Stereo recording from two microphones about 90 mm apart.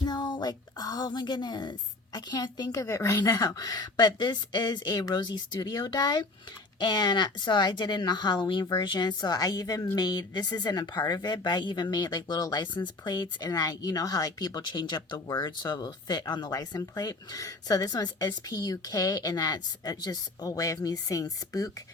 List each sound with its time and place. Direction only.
0.0 s a woman's voice: 55° left (ahead or behind)
2.7 s speech: 35° left (ahead or behind); by 16.2 s 50° left (ahead or behind)
16.5 s speech: 40° left (ahead or behind)